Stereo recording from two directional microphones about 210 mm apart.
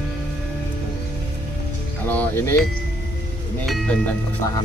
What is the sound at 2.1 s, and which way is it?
Speech, 10° left (ahead or behind).